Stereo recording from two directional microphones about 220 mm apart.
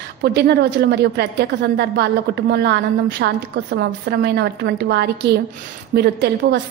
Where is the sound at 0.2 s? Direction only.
50° right (ahead or behind).